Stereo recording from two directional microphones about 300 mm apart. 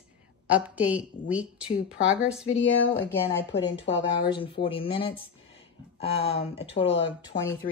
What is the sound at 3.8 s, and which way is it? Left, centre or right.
Speech, centre.